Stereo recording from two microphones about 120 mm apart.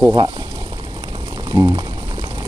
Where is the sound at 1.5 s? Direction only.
25° right (ahead or behind).